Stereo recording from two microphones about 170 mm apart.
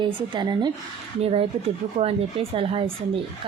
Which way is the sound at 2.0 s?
35° right (ahead or behind).